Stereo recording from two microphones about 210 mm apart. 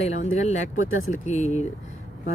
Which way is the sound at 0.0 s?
30° left (ahead or behind).